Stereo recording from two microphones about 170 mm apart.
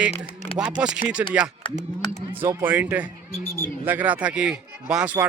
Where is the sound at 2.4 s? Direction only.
10° right (ahead or behind).